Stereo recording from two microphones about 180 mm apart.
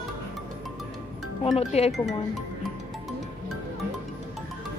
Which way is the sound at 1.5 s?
35° left (ahead or behind).